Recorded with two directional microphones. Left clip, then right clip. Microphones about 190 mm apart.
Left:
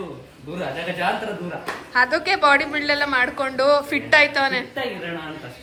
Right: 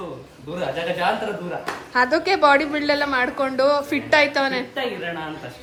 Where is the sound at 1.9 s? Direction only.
25° right (ahead or behind).